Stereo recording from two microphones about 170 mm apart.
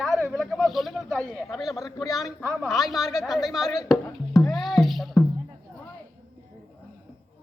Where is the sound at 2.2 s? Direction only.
Centre (ahead or behind).